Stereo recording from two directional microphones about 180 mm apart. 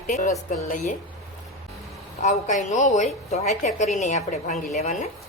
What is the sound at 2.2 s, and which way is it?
A woman's voice, 40° left (ahead or behind).